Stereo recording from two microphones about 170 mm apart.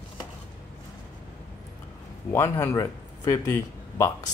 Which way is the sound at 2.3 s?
15° left (ahead or behind).